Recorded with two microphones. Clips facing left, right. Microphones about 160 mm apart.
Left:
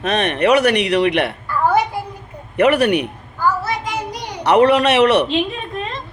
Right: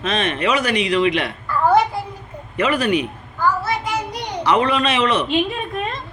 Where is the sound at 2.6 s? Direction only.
65° left (ahead or behind).